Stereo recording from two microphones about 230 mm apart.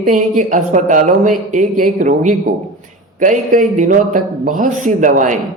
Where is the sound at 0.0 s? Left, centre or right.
Right.